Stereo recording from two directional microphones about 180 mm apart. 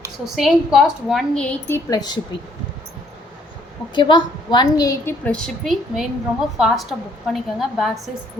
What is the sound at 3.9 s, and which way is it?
A woman's voice, 25° left (ahead or behind).